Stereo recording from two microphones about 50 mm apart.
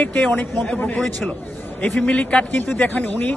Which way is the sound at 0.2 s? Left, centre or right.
Left.